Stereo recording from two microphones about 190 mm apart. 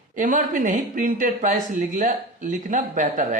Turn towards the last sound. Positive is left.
turn(degrees=-40)  # may be behind; listen again after turning